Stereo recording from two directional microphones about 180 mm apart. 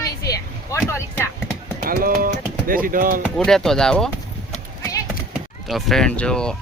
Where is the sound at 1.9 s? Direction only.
55° right (ahead or behind).